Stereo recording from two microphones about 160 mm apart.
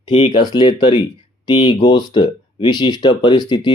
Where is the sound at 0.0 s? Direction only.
30° left (ahead or behind).